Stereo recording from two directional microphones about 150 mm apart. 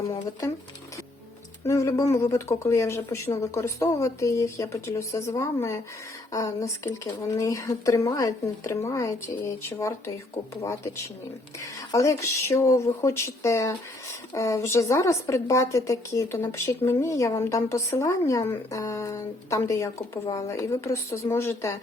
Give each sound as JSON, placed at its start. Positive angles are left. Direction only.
{"t": 1.6, "sound": "speech", "side_deg": 20}